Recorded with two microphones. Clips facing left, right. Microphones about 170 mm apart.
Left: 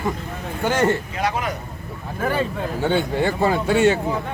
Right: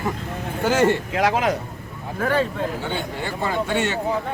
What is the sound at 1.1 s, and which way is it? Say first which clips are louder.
Speech: right 4 dB; 90° right.